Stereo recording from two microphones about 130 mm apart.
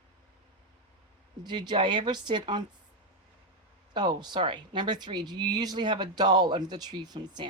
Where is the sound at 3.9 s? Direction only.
35° right (ahead or behind).